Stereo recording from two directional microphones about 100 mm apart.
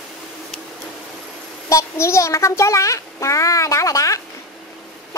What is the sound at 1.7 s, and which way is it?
Speech, 30° left (ahead or behind).